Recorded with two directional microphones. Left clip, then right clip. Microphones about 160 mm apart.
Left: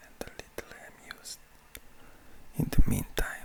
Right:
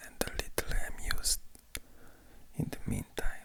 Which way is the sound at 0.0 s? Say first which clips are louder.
Right 6 dB; 10° right (ahead or behind).